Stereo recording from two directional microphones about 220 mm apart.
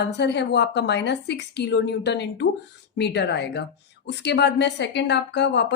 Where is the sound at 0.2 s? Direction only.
50° left (ahead or behind).